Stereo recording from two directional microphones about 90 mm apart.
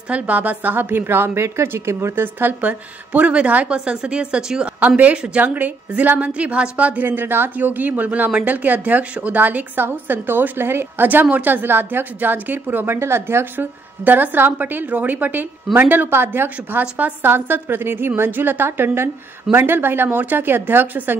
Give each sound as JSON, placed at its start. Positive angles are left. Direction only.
{"t": 0.1, "sound": "a woman's voice", "side_deg": -15}